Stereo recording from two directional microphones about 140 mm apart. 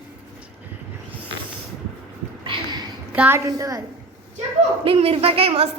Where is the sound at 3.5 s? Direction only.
25° right (ahead or behind).